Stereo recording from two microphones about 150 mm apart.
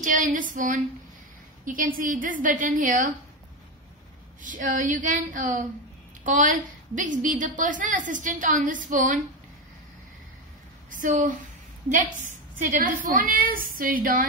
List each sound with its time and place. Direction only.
0.0 s a woman's voice: 60° right (ahead or behind)
4.4 s a woman's voice: 60° right (ahead or behind)
10.9 s a woman's voice: 60° right (ahead or behind)